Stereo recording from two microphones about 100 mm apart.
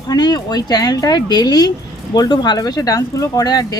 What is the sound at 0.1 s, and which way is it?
Speech, 40° left (ahead or behind).